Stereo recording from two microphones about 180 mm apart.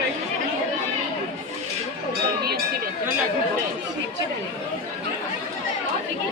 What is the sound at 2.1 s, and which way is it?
Cowbell, 60° right (ahead or behind).